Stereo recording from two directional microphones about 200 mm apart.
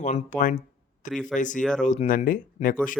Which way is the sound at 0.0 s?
35° left (ahead or behind).